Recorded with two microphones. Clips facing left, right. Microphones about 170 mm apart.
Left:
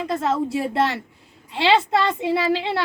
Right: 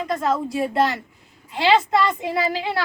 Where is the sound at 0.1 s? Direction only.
25° left (ahead or behind).